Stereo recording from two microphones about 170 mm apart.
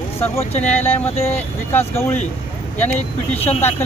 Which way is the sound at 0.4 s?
40° left (ahead or behind).